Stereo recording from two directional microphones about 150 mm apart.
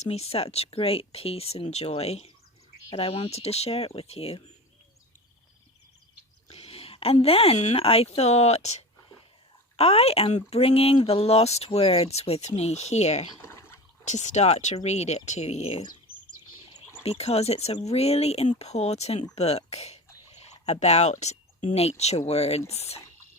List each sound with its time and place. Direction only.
0.0 s speech: 45° left (ahead or behind)
6.5 s speech: 40° left (ahead or behind)
13.4 s a sound: 15° left (ahead or behind)
14.0 s speech: 50° left (ahead or behind)
17.0 s speech: 45° left (ahead or behind)